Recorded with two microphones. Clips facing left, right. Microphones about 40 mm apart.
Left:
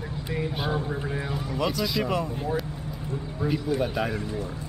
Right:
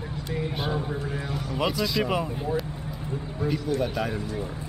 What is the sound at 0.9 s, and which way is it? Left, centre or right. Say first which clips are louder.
Speech: left 1 dB; centre.